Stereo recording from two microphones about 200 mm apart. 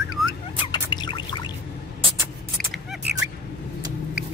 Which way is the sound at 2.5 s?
Centre (ahead or behind).